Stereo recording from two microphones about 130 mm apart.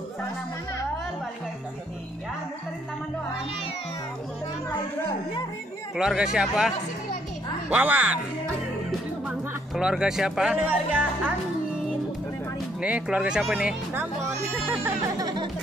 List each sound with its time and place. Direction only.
5.9 s speech: 5° right (ahead or behind)
7.7 s speech: 10° right (ahead or behind)
9.8 s speech: 5° right (ahead or behind)
12.8 s speech: 10° right (ahead or behind)
15.1 s music: 35° right (ahead or behind)